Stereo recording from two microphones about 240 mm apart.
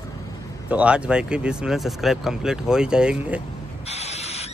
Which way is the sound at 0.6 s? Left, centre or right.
Centre.